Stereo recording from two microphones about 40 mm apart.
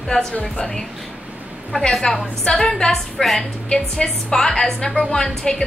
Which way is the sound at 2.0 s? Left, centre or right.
Left.